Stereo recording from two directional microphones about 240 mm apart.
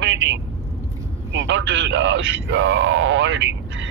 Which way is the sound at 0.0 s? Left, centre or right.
Right.